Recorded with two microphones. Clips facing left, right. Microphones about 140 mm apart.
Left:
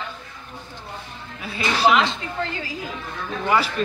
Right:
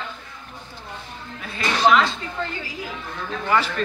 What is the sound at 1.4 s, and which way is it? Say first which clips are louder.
Speech: even; 10° left (ahead or behind).